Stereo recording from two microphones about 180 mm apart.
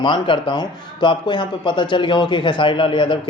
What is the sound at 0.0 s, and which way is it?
A man's voice, 25° left (ahead or behind).